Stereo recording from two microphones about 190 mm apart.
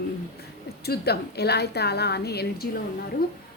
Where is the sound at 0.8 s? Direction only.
55° left (ahead or behind).